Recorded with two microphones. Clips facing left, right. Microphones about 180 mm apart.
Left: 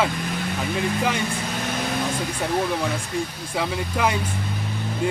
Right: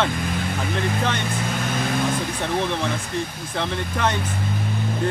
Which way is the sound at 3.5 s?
5° left (ahead or behind).